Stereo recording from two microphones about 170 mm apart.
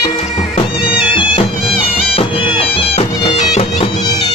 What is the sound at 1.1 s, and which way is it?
Music, 30° left (ahead or behind).